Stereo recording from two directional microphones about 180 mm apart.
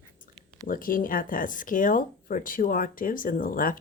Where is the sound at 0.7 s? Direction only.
50° left (ahead or behind).